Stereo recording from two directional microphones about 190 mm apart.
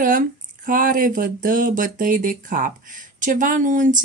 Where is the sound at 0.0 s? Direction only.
45° right (ahead or behind).